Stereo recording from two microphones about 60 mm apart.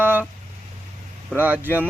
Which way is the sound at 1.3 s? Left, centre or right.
Right.